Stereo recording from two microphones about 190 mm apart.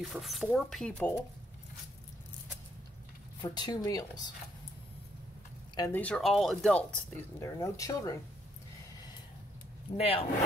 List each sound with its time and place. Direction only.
0.0 s speech: centre (ahead or behind)
3.3 s a woman's voice: 20° left (ahead or behind)
5.8 s speech: 10° left (ahead or behind)
7.3 s speech: 15° left (ahead or behind)
9.9 s speech: 30° left (ahead or behind)